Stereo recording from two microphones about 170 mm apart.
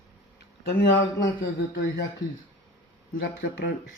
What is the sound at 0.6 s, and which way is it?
Speech, 75° left (ahead or behind).